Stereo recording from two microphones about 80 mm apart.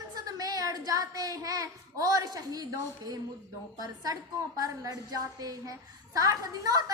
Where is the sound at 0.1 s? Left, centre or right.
Right.